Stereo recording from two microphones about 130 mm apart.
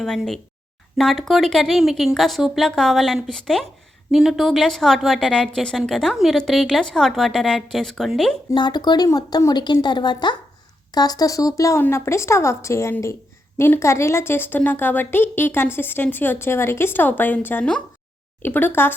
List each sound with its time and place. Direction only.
0.0 s a woman's voice: centre (ahead or behind)
8.5 s a woman's voice: 35° left (ahead or behind); by 18.9 s 15° left (ahead or behind)